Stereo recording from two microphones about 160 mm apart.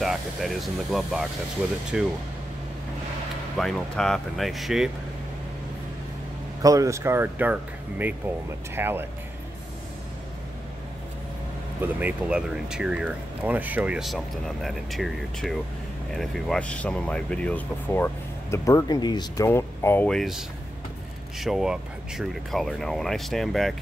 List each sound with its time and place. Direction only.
0.0 s speech: centre (ahead or behind)
3.5 s speech: centre (ahead or behind)
6.6 s speech: 20° right (ahead or behind)
8.7 s speech: 15° right (ahead or behind)
11.8 s speech: 10° right (ahead or behind); by 20.1 s 15° left (ahead or behind)
20.1 s speech: centre (ahead or behind)